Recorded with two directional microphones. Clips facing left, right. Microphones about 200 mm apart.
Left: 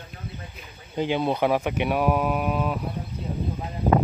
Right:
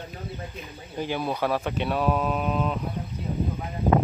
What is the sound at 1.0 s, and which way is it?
Speech, 20° left (ahead or behind).